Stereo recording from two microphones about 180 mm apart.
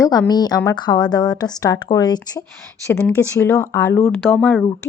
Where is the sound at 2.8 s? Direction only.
10° left (ahead or behind).